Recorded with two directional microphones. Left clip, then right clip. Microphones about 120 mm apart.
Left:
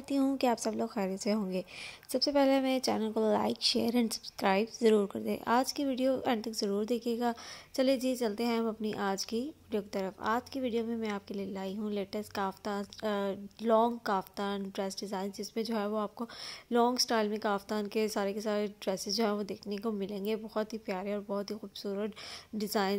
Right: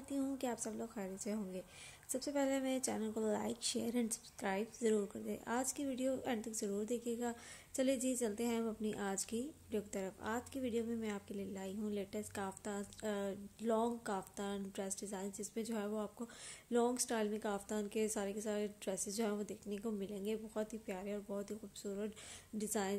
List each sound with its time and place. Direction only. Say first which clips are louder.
0.1 s a woman's voice: left 11 dB; 55° left (ahead or behind)
2.1 s a woman's voice: left 11 dB; 40° left (ahead or behind)
7.7 s a woman's voice: left 8 dB; 25° left (ahead or behind)